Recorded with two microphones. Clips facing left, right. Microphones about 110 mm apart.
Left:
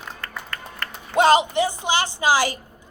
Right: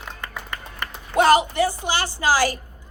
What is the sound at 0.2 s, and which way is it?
Music, 15° right (ahead or behind).